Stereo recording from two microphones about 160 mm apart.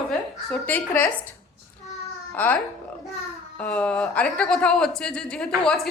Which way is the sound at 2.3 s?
10° left (ahead or behind).